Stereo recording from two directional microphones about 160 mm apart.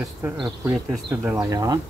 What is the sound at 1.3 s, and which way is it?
Speech, 20° right (ahead or behind).